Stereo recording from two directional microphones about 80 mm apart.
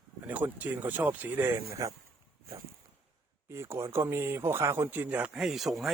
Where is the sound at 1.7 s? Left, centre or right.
Right.